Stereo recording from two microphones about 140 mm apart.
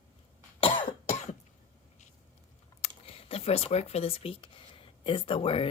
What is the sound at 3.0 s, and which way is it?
A woman's voice, 45° left (ahead or behind).